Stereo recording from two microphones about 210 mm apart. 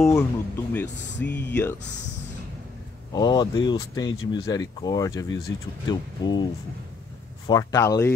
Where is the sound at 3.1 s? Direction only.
20° left (ahead or behind).